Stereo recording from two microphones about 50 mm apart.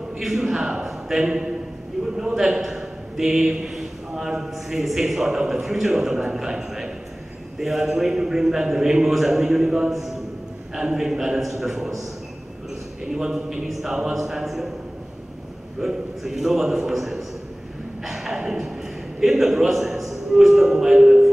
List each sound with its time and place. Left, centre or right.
0.2 s a man's voice: centre
13.0 s a man's voice: centre
15.8 s a man's voice: centre